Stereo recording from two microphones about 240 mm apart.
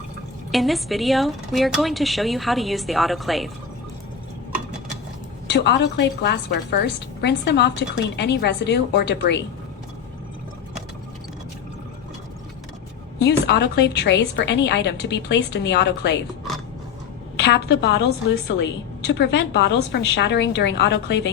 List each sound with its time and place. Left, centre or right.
0.5 s speech: centre
5.5 s a woman's voice: left
13.1 s a woman's voice: left
17.4 s a woman's voice: left